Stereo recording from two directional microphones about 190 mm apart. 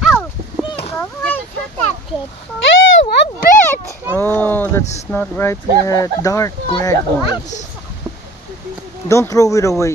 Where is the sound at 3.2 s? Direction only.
65° left (ahead or behind).